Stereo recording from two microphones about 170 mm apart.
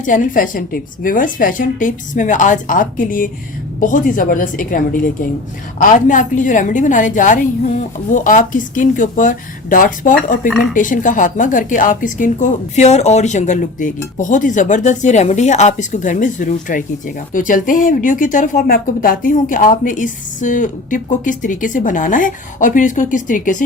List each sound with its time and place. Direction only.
0.0 s speech: 50° left (ahead or behind)